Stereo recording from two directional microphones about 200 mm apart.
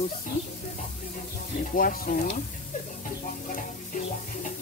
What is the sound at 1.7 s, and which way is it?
Speech, 45° left (ahead or behind).